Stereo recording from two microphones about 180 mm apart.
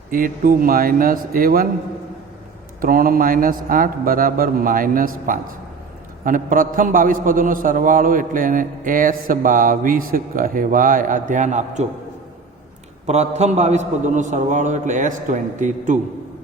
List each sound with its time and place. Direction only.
0.1 s a man's voice: 50° right (ahead or behind)
2.8 s a man's voice: 55° right (ahead or behind)
13.1 s a man's voice: 40° right (ahead or behind)